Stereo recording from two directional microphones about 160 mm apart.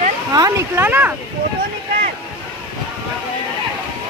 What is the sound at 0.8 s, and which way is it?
Speech, 10° right (ahead or behind).